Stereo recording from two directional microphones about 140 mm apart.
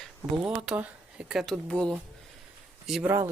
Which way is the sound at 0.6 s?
5° right (ahead or behind).